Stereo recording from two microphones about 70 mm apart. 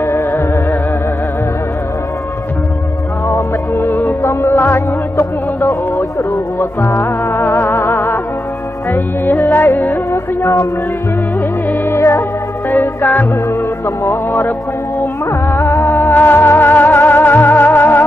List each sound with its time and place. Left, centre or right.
0.0 s music: left
3.3 s music: left
10.1 s music: left
11.8 s music: left
12.7 s music: left
15.5 s music: left